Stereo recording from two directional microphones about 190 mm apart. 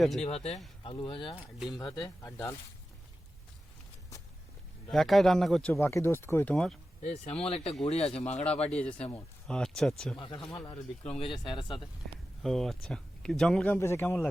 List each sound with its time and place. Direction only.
0.0 s speech: centre (ahead or behind)
0.3 s speech: 35° left (ahead or behind); by 2.6 s 15° left (ahead or behind)
4.9 s speech: centre (ahead or behind)
5.8 s speech: 15° left (ahead or behind)
7.0 s speech: 35° left (ahead or behind)
8.7 s speech: 5° left (ahead or behind)
10.2 s speech: 25° left (ahead or behind)
12.4 s speech: centre (ahead or behind)